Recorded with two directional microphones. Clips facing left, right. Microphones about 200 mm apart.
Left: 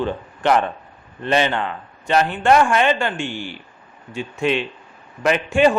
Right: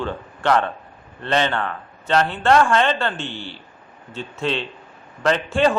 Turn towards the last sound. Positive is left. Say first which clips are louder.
# left 2 dB
turn(degrees=15)  # may be behind; listen again after turning